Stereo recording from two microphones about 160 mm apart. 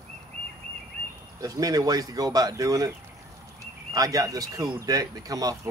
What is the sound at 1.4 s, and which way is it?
Speech, 20° right (ahead or behind).